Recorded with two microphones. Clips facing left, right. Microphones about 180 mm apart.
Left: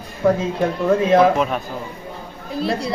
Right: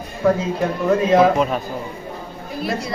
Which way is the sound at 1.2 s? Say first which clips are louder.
Even; centre (ahead or behind).